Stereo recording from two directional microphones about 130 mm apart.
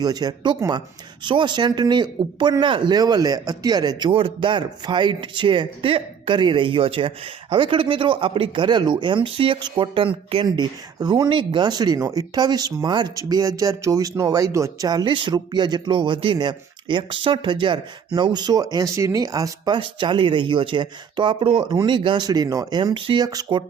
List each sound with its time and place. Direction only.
0.0 s speech: 30° right (ahead or behind)